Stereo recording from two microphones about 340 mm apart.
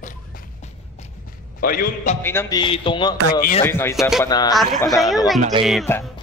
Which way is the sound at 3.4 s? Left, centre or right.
Left.